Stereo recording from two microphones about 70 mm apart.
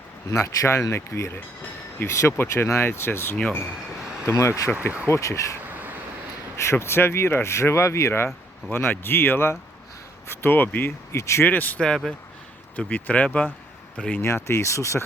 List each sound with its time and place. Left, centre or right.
0.3 s speech: left
6.6 s speech: left
11.1 s speech: left
11.4 s speech: left
11.8 s speech: centre
12.7 s speech: left
14.2 s speech: left